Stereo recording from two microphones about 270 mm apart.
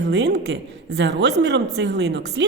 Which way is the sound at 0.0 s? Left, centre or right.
Right.